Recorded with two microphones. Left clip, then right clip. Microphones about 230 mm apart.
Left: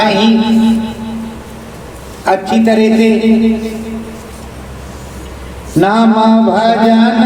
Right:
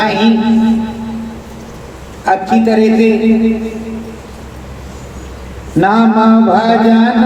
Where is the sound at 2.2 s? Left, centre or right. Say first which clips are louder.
Even; left.